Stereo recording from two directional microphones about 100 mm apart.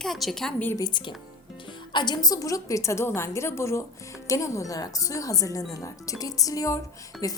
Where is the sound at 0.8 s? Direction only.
50° left (ahead or behind).